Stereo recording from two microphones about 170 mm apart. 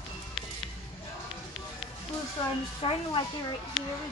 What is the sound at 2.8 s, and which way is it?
Speech, 30° left (ahead or behind).